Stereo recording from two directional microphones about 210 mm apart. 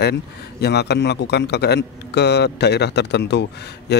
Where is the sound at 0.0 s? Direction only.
50° left (ahead or behind).